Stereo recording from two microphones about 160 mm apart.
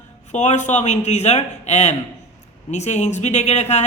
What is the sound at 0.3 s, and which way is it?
Speech, 50° left (ahead or behind).